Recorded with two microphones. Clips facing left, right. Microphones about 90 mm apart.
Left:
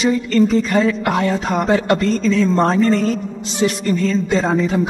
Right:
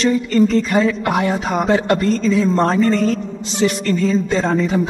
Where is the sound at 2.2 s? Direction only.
5° right (ahead or behind).